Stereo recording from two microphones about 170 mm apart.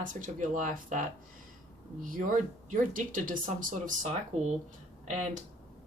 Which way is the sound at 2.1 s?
50° right (ahead or behind).